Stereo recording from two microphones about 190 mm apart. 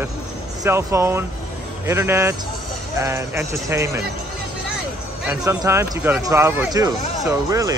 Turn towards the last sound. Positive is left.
turn(degrees=-15)  # may be behind; listen again after turning